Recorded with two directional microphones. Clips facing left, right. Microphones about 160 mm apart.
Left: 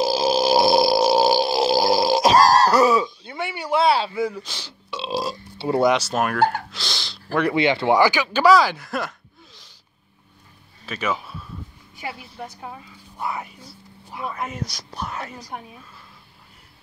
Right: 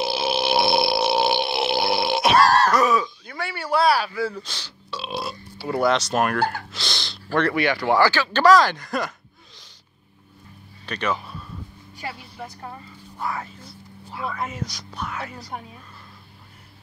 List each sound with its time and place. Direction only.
0.0 s burping: 40° left (ahead or behind)
4.3 s speech: 10° left (ahead or behind)
5.3 s a sound: 25° left (ahead or behind)
5.9 s speech: 5° left (ahead or behind)
7.4 s speech: 20° left (ahead or behind); by 9.1 s 5° left (ahead or behind)
10.9 s speech: 5° left (ahead or behind)
15.0 s a woman's voice: 35° left (ahead or behind)
15.5 s a woman's voice: centre (ahead or behind)